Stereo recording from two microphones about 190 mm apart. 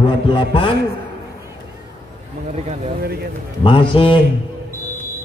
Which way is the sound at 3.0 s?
55° right (ahead or behind).